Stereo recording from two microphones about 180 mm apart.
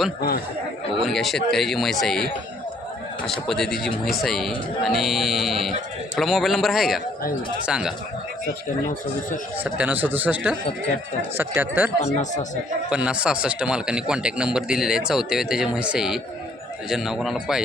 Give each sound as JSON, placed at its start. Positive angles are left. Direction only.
{"t": 0.2, "sound": "speech", "side_deg": 60}
{"t": 1.0, "sound": "a man's voice", "side_deg": 0}
{"t": 3.2, "sound": "a man's voice", "side_deg": 0}
{"t": 9.6, "sound": "speech", "side_deg": -10}
{"t": 12.1, "sound": "speech", "side_deg": 45}
{"t": 12.9, "sound": "a man's voice", "side_deg": -5}